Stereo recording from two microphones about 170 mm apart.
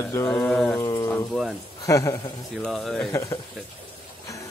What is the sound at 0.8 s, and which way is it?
Speech, 20° left (ahead or behind).